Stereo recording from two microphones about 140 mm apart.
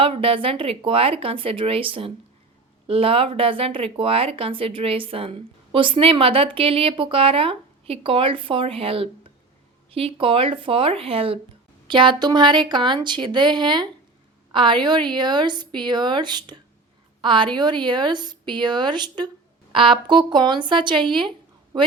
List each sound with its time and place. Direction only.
0.0 s speech: 40° right (ahead or behind)